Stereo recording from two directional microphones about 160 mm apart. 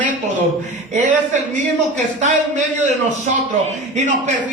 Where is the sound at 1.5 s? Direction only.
50° right (ahead or behind).